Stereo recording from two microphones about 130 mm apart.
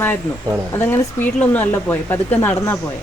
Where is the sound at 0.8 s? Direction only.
15° left (ahead or behind).